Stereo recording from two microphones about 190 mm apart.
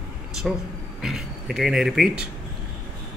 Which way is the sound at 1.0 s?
Centre (ahead or behind).